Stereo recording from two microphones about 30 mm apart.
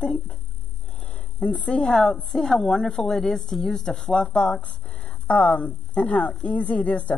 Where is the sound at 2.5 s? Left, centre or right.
Centre.